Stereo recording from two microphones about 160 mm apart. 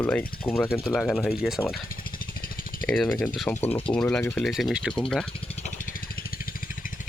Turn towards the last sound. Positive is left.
turn(degrees=5)  # may be behind; listen again after turning